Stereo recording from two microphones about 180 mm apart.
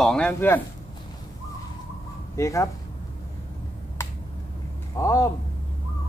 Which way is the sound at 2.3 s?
15° left (ahead or behind).